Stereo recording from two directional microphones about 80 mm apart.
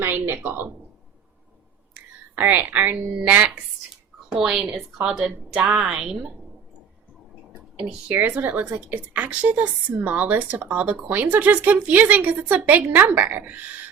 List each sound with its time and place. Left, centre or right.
0.0 s a woman's voice: right
2.3 s a woman's voice: right
4.4 s a woman's voice: centre
7.8 s a woman's voice: centre
8.1 s a woman's voice: right